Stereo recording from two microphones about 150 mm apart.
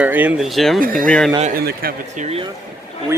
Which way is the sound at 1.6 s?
90° right.